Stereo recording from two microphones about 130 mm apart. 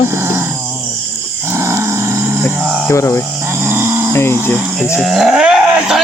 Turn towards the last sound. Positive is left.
turn(degrees=-5)  # may be behind; listen again after turning